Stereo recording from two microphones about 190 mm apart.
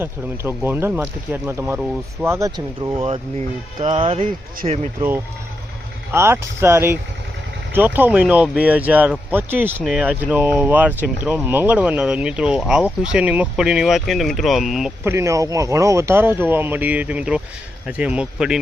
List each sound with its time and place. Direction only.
0.0 s speech: 10° right (ahead or behind)
2.9 s speech: 30° right (ahead or behind)
6.1 s speech: 10° right (ahead or behind)
15.0 s speech: 15° right (ahead or behind)